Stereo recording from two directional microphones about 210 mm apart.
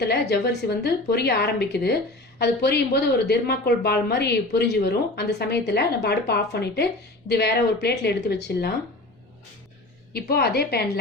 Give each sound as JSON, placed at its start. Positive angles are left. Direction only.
{"t": 0.0, "sound": "speech", "side_deg": 50}
{"t": 10.1, "sound": "speech", "side_deg": 50}